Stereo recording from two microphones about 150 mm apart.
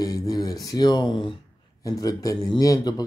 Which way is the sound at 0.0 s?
25° left (ahead or behind).